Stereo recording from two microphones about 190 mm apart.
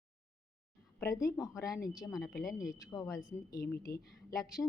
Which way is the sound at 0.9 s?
15° left (ahead or behind).